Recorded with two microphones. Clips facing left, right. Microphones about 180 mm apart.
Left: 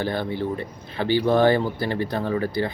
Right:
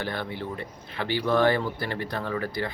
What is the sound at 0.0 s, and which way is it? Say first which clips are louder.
Speech: left 6 dB; 30° left (ahead or behind).